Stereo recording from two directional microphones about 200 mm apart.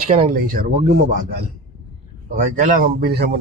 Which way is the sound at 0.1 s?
35° right (ahead or behind).